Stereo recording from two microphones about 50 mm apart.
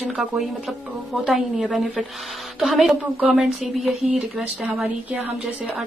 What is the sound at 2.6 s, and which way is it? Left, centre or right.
Speech, centre.